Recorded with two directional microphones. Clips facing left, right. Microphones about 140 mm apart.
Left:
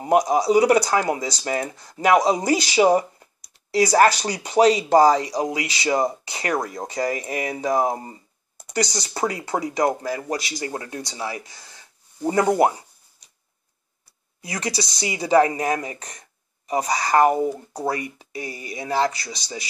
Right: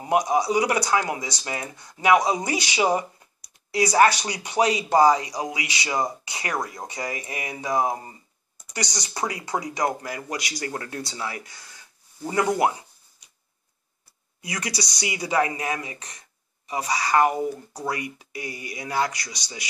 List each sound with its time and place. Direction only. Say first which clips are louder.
0.0 s speech: left 3 dB; 35° left (ahead or behind)
14.4 s speech: left 3 dB; 30° left (ahead or behind)